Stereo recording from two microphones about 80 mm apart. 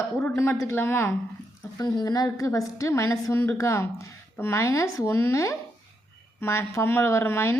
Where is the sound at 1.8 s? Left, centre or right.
Left.